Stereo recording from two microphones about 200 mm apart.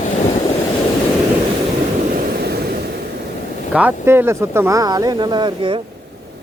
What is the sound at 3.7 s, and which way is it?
Speech, 10° right (ahead or behind).